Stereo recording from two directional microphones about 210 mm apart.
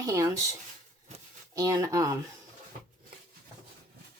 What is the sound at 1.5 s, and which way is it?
Speech, 15° right (ahead or behind).